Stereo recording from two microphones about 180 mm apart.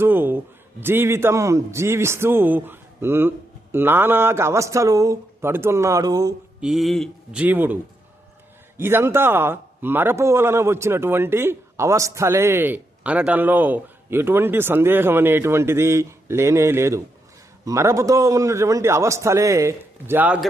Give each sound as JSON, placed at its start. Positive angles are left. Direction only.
{"t": 0.0, "sound": "a man's voice", "side_deg": -10}
{"t": 6.6, "sound": "a man's voice", "side_deg": 0}
{"t": 7.4, "sound": "a man's voice", "side_deg": -10}
{"t": 8.8, "sound": "a man's voice", "side_deg": -15}